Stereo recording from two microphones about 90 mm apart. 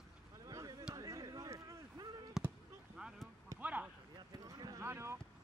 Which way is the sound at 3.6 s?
15° right (ahead or behind).